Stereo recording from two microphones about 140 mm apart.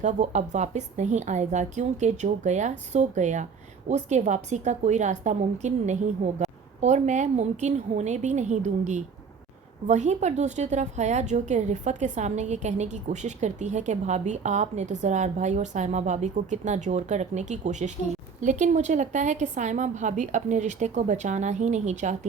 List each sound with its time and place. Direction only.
0.0 s a woman's voice: 55° right (ahead or behind)